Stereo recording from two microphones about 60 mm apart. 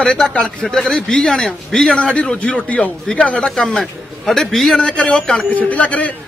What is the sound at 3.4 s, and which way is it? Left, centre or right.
A man's voice, centre.